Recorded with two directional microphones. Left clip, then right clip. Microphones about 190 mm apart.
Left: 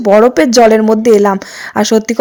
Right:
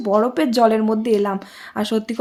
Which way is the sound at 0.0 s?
40° left (ahead or behind).